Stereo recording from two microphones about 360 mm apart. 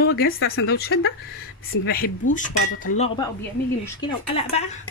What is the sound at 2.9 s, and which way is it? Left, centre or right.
Speech, centre.